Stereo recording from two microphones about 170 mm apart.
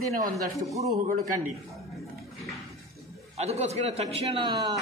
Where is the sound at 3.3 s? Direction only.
40° right (ahead or behind).